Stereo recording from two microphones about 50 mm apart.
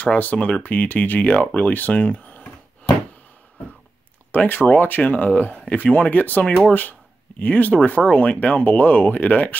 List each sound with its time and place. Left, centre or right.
0.0 s speech: left
4.3 s speech: left